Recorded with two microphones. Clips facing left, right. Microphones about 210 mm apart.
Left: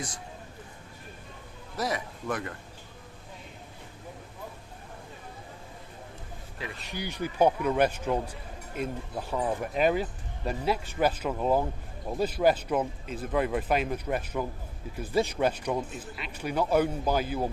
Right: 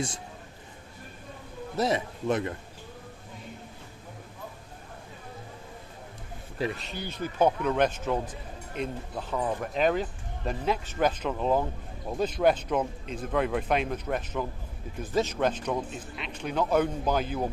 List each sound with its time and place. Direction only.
1.7 s a man's voice: 25° right (ahead or behind)
6.6 s speech: 40° right (ahead or behind)
6.9 s speech: 15° left (ahead or behind)